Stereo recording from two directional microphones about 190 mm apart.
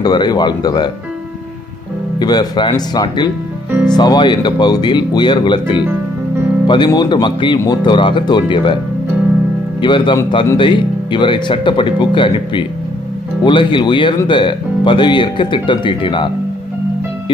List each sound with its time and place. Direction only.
0.0 s speech: 20° left (ahead or behind)
2.1 s speech: 20° left (ahead or behind)
9.8 s speech: 25° left (ahead or behind)